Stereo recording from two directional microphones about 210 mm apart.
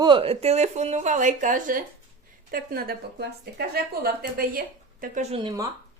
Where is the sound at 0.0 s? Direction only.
25° right (ahead or behind).